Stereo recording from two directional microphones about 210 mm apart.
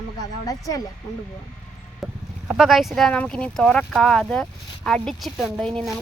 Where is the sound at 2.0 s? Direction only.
5° right (ahead or behind).